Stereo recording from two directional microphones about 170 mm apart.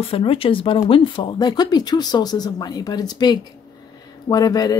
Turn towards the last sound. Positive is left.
turn(degrees=20)  # may be behind; listen again after turning